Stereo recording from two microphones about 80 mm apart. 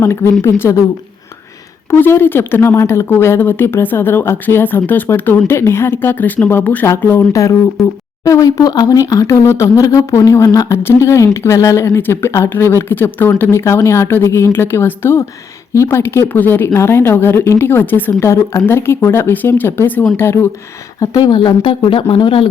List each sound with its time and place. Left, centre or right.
0.0 s a woman's voice: left
1.9 s a woman's voice: left
7.3 s speech: left
9.0 s speech: left
16.2 s a woman's voice: left
21.0 s speech: left